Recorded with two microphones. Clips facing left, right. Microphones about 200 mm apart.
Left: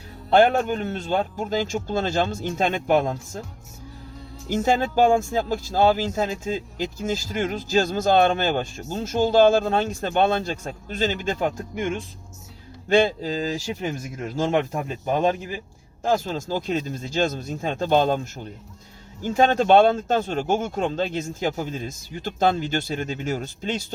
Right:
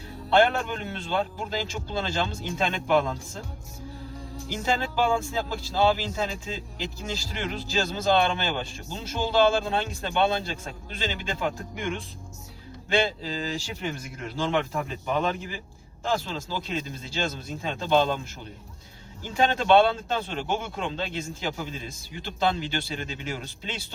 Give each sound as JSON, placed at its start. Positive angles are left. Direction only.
{"t": 0.3, "sound": "speech", "side_deg": 45}
{"t": 4.4, "sound": "speech", "side_deg": 45}
{"t": 19.2, "sound": "speech", "side_deg": 45}